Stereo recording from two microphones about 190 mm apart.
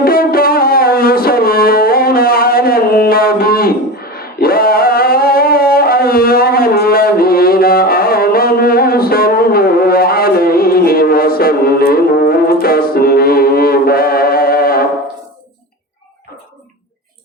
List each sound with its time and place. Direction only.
0.0 s music: 50° left (ahead or behind)